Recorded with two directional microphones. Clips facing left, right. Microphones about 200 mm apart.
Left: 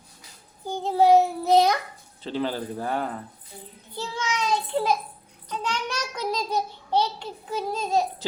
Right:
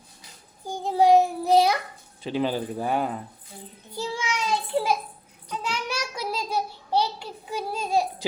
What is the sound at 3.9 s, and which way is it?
Child singing, 10° right (ahead or behind).